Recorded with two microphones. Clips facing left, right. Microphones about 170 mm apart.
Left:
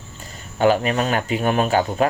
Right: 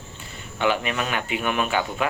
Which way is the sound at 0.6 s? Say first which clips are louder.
Left 6 dB; 40° left (ahead or behind).